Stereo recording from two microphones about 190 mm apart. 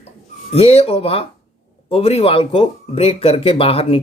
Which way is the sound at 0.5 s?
30° left (ahead or behind).